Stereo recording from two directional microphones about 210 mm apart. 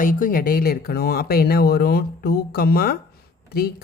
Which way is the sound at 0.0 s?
40° left (ahead or behind).